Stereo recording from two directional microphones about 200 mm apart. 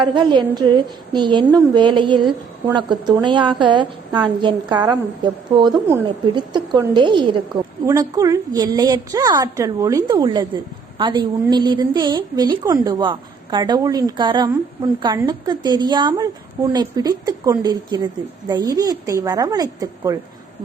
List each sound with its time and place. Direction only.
0.1 s a woman's voice: 25° right (ahead or behind)